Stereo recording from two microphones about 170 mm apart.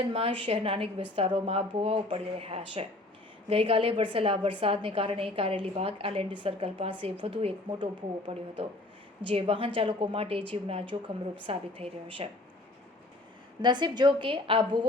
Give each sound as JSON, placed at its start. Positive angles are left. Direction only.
{"t": 0.0, "sound": "a woman's voice", "side_deg": -35}
{"t": 9.2, "sound": "a woman's voice", "side_deg": -30}
{"t": 13.6, "sound": "a woman's voice", "side_deg": -25}